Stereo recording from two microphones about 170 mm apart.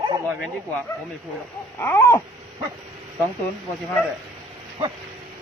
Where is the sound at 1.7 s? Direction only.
15° left (ahead or behind).